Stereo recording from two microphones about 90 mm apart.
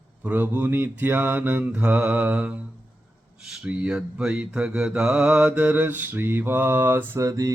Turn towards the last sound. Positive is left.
turn(degrees=-35)  # may be behind; listen again after turning